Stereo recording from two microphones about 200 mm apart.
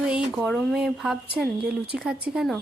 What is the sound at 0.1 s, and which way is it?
Speech, centre (ahead or behind).